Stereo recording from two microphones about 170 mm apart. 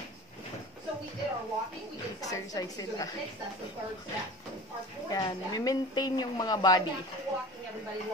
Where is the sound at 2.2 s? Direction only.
20° left (ahead or behind).